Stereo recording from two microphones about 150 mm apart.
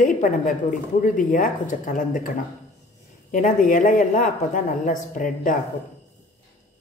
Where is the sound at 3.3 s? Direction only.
60° left (ahead or behind).